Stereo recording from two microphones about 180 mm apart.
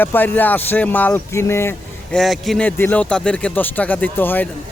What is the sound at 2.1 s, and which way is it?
Speech, centre (ahead or behind).